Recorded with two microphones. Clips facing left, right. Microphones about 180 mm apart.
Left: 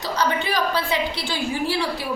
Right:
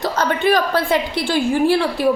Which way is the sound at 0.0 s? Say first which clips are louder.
Right 5 dB; 50° right (ahead or behind).